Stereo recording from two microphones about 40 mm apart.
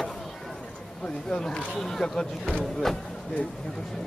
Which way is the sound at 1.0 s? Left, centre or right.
Centre.